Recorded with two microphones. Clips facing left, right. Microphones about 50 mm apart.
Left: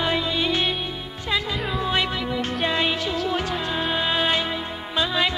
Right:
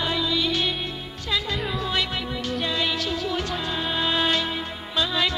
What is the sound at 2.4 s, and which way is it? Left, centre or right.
Music, left.